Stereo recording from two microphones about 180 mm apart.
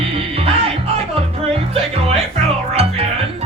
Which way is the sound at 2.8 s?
35° right (ahead or behind).